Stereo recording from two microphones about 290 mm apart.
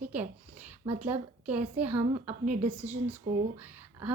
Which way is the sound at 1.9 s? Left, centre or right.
Right.